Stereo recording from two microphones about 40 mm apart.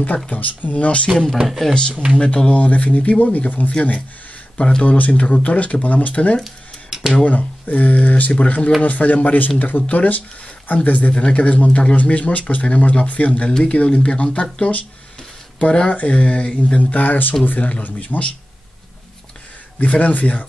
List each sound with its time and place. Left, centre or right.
0.3 s speech: left
1.6 s speech: centre; by 3.7 s left
4.6 s speech: left
4.8 s speech: left
6.9 s a sound: centre
7.2 s speech: left
15.9 s speech: left
19.8 s speech: left